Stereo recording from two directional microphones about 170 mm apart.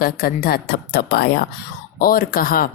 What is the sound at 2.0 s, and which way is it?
Speech, 55° left (ahead or behind).